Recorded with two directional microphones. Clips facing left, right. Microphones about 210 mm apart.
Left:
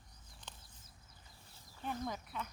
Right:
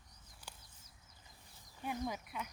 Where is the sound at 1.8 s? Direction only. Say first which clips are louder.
Right 1 dB; 10° right (ahead or behind).